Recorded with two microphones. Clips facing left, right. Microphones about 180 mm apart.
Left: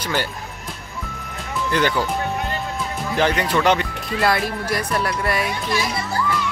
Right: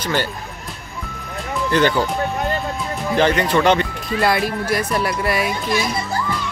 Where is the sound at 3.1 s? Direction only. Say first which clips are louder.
Right 3 dB; 10° left (ahead or behind).